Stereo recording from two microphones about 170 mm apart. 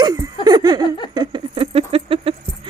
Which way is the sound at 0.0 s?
20° right (ahead or behind).